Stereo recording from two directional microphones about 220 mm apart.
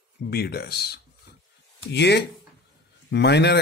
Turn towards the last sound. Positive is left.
turn(degrees=50)  # may be behind; listen again after turning